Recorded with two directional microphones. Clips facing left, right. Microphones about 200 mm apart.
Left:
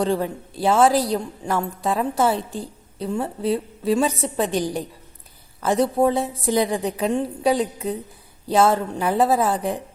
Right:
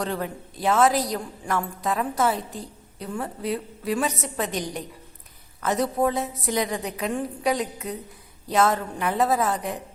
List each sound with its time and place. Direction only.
0.0 s a woman's voice: 30° left (ahead or behind)